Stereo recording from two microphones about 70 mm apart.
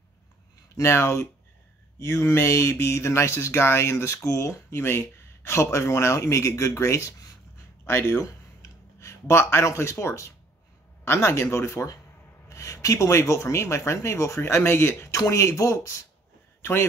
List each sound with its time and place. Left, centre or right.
0.7 s speech: left
7.8 s speech: left